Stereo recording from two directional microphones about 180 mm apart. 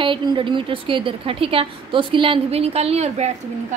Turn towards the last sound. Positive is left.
turn(degrees=-35)  # may be behind; listen again after turning